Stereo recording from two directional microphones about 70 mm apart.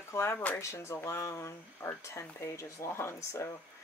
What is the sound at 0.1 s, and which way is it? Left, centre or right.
Speech, left.